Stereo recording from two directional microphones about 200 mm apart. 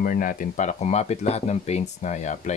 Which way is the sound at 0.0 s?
40° left (ahead or behind).